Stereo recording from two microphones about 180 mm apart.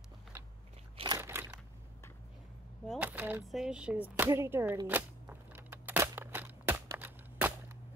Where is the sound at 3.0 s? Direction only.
10° right (ahead or behind).